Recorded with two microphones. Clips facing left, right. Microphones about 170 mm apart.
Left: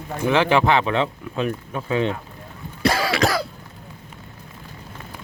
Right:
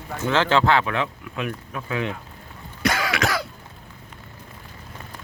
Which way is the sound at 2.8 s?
30° left (ahead or behind).